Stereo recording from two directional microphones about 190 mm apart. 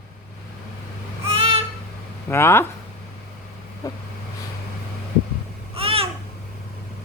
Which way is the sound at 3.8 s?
15° left (ahead or behind).